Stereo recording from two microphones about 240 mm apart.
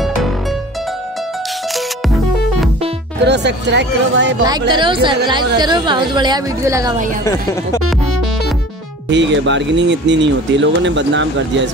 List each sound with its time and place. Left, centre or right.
3.3 s speech: right
4.5 s a woman's voice: centre
9.1 s speech: right